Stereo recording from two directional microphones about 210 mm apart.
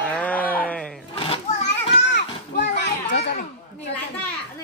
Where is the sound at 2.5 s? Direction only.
55° left (ahead or behind).